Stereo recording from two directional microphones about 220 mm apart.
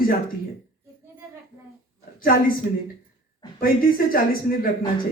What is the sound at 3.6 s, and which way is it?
Speech, 40° left (ahead or behind).